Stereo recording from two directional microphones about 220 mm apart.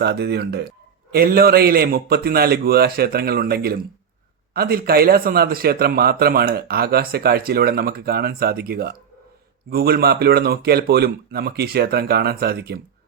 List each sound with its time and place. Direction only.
0.0 s speech: 50° right (ahead or behind)